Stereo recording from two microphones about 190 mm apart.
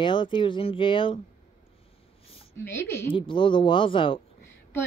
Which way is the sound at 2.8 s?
15° left (ahead or behind).